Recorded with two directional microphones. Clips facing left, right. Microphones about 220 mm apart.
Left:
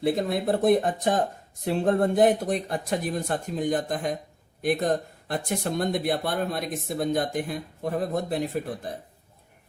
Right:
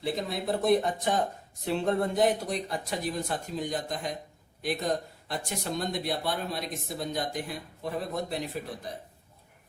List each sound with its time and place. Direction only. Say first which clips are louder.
0.0 s speech: left 7 dB; 55° left (ahead or behind)